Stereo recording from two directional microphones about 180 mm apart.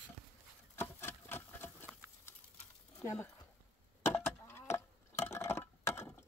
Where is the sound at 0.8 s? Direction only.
10° left (ahead or behind).